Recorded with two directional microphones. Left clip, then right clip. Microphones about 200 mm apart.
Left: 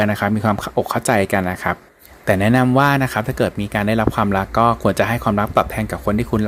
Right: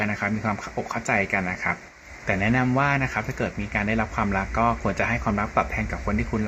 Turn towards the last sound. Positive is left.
turn(degrees=45)  # may be behind; listen again after turning